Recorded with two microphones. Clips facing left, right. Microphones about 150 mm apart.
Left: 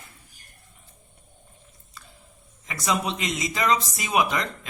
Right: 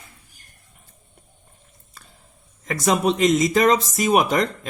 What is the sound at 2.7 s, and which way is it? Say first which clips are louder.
Speech: right 7 dB; 45° right (ahead or behind).